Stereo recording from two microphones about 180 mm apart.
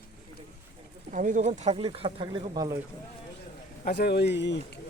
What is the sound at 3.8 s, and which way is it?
Speech, 65° left (ahead or behind).